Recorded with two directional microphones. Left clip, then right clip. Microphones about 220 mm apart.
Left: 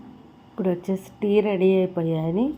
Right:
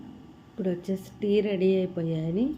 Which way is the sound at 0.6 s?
Centre (ahead or behind).